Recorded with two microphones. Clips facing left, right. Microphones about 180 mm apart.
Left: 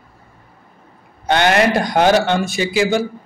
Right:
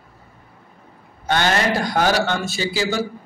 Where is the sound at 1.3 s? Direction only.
15° left (ahead or behind).